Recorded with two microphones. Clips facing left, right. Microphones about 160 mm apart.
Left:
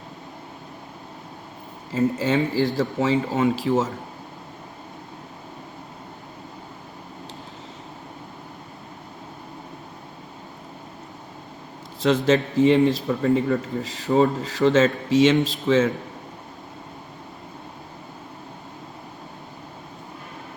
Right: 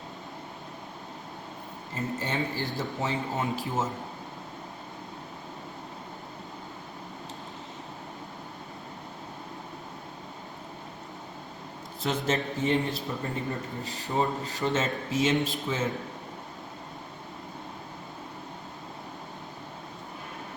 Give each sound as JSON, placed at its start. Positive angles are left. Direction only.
{"t": 2.1, "sound": "a man's voice", "side_deg": 90}
{"t": 12.0, "sound": "a man's voice", "side_deg": 90}